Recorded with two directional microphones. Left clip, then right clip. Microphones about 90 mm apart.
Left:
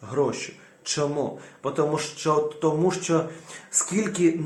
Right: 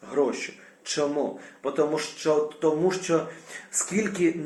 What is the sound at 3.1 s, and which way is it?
Speech, 20° left (ahead or behind).